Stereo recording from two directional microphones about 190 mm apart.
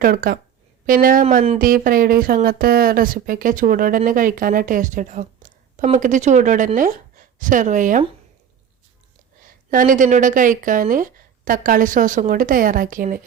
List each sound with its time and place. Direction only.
0.0 s speech: 50° right (ahead or behind)
9.6 s speech: 45° right (ahead or behind)